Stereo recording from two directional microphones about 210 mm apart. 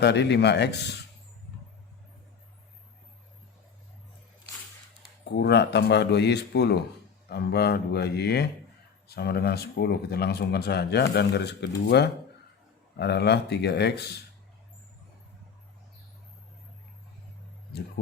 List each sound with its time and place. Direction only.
0.0 s speech: 55° left (ahead or behind)
5.2 s speech: 55° left (ahead or behind)